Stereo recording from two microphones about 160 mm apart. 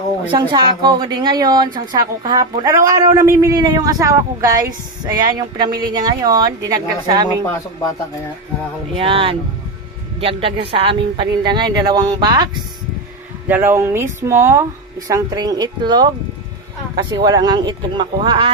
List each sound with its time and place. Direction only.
0.3 s a woman's voice: 30° right (ahead or behind)
9.0 s a woman's voice: 35° right (ahead or behind)
13.5 s a woman's voice: 15° right (ahead or behind); by 18.5 s 30° right (ahead or behind)